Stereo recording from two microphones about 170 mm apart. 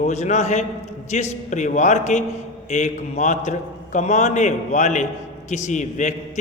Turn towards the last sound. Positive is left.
turn(degrees=45)  # may be behind; listen again after turning